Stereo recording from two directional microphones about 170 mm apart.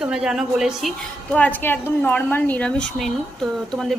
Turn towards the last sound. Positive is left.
turn(degrees=0)  # may be behind; listen again after turning